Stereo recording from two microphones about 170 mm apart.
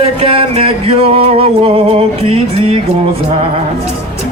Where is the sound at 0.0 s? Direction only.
35° right (ahead or behind).